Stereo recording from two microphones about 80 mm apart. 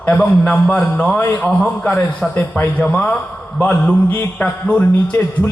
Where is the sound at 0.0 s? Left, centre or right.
Centre.